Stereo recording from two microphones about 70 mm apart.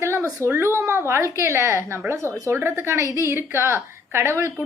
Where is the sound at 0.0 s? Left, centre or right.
Right.